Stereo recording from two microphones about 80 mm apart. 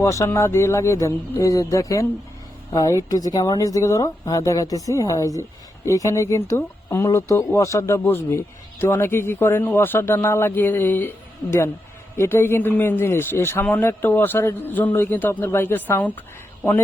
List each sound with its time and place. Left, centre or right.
0.0 s a man's voice: left
12.1 s a man's voice: left